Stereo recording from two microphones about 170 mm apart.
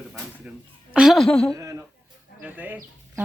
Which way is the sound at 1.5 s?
20° right (ahead or behind).